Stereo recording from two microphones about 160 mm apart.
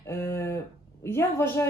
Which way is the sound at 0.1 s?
15° left (ahead or behind).